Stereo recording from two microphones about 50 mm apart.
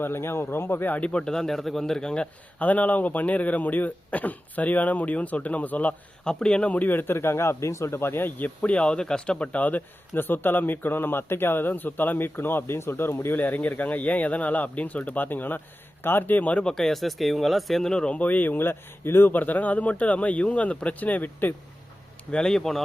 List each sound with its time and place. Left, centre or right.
0.0 s a man's voice: left
1.0 s a man's voice: centre
2.6 s speech: left
6.2 s a man's voice: centre
8.8 s a man's voice: centre; by 13.3 s left
13.3 s speech: left
16.6 s speech: centre
17.8 s a man's voice: centre
18.2 s a man's voice: left
19.3 s speech: left
22.3 s a man's voice: centre